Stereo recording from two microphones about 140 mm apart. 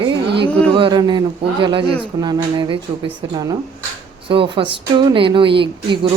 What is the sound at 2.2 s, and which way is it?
Speech, 35° right (ahead or behind).